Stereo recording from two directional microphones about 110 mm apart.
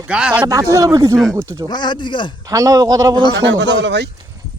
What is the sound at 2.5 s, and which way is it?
Speech, 30° right (ahead or behind).